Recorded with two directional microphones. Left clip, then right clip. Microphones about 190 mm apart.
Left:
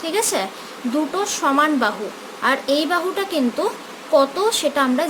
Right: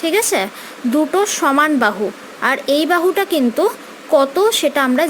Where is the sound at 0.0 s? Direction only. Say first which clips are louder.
Right 5 dB; 35° right (ahead or behind).